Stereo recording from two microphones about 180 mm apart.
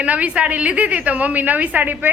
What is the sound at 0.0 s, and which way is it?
A woman's voice, 5° right (ahead or behind).